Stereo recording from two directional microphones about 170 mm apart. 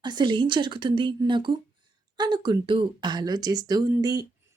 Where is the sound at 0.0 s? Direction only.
25° right (ahead or behind).